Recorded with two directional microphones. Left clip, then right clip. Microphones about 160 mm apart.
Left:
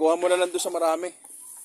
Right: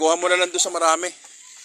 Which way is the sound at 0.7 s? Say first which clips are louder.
Right 5 dB; 10° left (ahead or behind).